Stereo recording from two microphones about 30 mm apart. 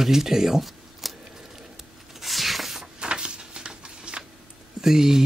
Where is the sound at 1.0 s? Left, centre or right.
Centre.